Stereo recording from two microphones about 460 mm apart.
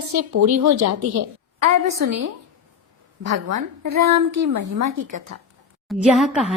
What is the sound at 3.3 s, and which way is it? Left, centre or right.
A woman's voice, right.